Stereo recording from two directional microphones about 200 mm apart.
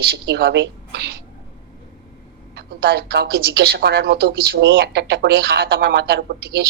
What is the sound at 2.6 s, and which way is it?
Speech, 55° right (ahead or behind).